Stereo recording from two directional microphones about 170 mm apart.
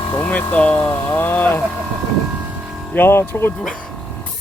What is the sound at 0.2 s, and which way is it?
Speech, 10° left (ahead or behind).